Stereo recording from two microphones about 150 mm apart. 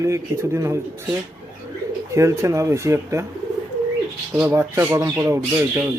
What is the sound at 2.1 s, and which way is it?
Speech, 20° right (ahead or behind).